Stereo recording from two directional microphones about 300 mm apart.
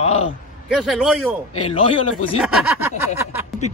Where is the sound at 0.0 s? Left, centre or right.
Centre.